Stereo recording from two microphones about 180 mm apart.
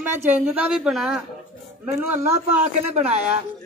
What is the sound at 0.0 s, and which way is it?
A woman's voice, 10° right (ahead or behind).